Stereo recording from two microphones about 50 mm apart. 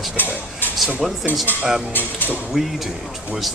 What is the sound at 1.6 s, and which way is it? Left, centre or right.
Speech, centre.